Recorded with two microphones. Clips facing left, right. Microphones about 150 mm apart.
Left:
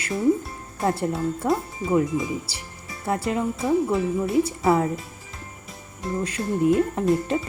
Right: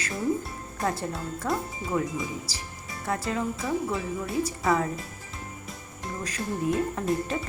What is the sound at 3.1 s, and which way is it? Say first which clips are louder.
Speech: left 5 dB; 25° left (ahead or behind).